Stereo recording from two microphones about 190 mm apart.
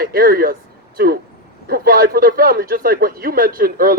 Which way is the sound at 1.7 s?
50° right (ahead or behind).